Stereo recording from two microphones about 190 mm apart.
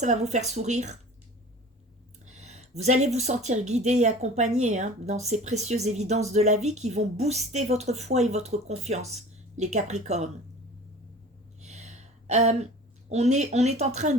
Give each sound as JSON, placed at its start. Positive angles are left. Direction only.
{"t": 0.0, "sound": "speech", "side_deg": -35}
{"t": 2.2, "sound": "speech", "side_deg": -35}
{"t": 11.6, "sound": "a sound", "side_deg": -35}
{"t": 13.1, "sound": "speech", "side_deg": -35}